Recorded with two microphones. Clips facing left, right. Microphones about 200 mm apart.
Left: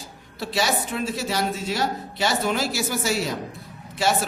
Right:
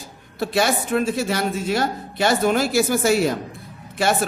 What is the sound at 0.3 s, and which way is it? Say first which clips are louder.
A man's voice: right 4 dB; 50° right (ahead or behind).